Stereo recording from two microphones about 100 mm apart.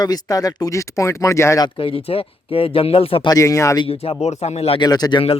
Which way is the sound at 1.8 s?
65° left (ahead or behind).